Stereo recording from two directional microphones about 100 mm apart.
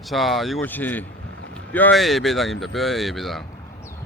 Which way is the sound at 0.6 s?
20° left (ahead or behind).